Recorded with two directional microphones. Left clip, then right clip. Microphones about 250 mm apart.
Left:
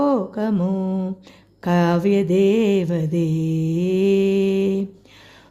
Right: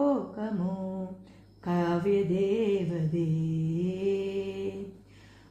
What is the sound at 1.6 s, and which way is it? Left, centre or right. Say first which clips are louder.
Speech: left 10 dB; left.